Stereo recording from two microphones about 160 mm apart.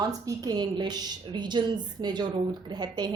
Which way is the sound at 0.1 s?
20° right (ahead or behind).